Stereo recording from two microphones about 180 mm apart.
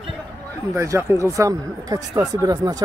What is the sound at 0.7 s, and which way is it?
Speech, 15° right (ahead or behind).